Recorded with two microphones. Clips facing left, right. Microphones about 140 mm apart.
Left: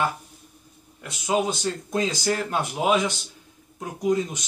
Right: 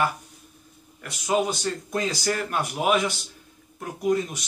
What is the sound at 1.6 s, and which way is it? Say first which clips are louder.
Speech: left 2 dB; 20° left (ahead or behind).